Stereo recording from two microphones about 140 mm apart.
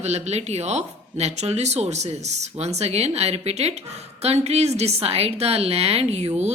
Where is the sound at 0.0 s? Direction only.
50° right (ahead or behind).